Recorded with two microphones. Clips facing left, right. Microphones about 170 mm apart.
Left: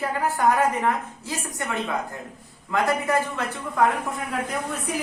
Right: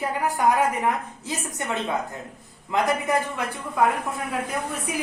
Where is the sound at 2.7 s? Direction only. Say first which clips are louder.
Even; 20° right (ahead or behind).